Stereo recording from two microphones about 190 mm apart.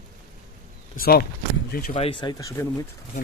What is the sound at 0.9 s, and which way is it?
Speech, 50° left (ahead or behind).